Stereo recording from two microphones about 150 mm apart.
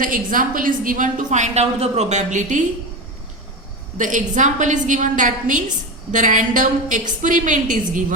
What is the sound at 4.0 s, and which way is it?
A woman's voice, 60° right (ahead or behind).